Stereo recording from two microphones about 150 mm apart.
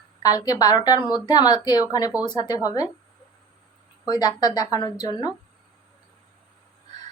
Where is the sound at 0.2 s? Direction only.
25° left (ahead or behind).